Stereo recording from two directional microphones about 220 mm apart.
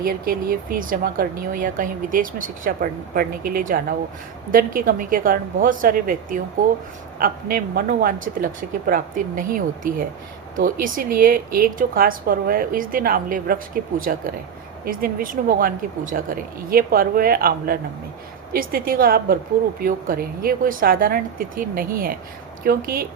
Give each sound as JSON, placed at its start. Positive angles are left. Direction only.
{"t": 0.0, "sound": "speech", "side_deg": -40}